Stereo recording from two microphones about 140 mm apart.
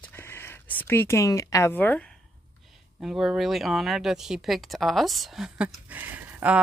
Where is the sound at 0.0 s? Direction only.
15° left (ahead or behind).